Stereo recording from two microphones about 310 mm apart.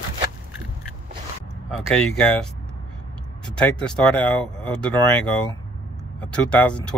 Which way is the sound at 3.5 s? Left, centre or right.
Centre.